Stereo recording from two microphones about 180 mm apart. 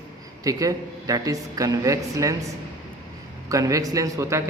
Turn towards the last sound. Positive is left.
turn(degrees=-15)  # may be behind; listen again after turning